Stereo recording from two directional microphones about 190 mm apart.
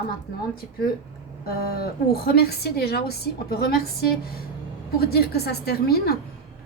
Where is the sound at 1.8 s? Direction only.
55° left (ahead or behind).